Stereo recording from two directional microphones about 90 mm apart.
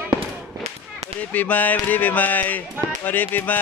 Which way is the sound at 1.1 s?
15° left (ahead or behind).